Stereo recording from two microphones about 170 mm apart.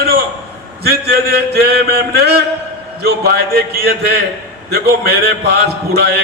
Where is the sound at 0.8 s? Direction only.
65° right (ahead or behind).